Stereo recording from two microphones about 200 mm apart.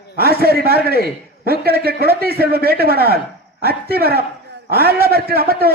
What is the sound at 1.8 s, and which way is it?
Speech, 50° right (ahead or behind).